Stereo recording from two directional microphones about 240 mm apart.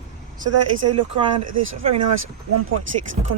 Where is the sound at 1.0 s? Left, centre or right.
Right.